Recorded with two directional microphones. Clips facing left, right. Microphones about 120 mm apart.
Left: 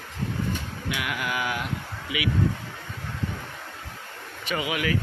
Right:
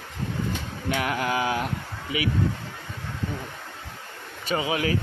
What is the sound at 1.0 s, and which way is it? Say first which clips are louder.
Speech: right 4 dB; 35° right (ahead or behind).